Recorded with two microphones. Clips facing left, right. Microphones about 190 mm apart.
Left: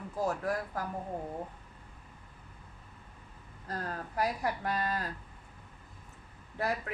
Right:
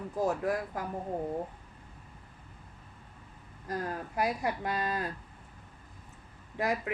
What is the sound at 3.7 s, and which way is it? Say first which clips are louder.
A woman's voice: right 3 dB; 15° right (ahead or behind).